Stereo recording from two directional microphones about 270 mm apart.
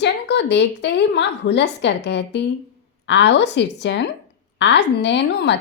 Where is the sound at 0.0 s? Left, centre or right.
Left.